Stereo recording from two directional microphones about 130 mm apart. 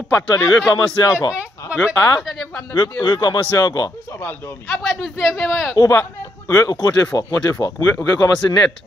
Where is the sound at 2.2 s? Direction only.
5° left (ahead or behind).